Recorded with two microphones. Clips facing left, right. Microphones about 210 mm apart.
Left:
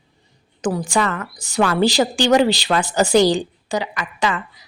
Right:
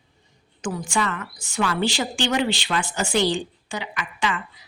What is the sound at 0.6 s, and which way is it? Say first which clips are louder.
A woman's voice: left 6 dB; 35° left (ahead or behind).